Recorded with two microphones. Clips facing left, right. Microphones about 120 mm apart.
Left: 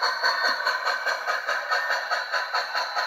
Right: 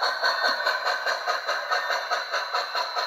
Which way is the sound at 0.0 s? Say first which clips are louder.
Even; 10° right (ahead or behind).